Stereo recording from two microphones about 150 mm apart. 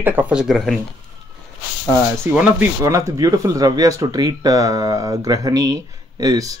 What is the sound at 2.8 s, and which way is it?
Speech, 20° right (ahead or behind).